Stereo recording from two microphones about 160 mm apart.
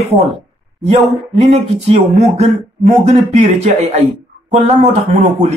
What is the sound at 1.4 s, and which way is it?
Speech, 45° right (ahead or behind).